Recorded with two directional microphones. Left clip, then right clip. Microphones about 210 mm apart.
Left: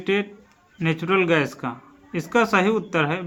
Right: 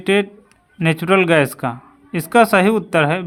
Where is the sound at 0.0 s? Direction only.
50° right (ahead or behind).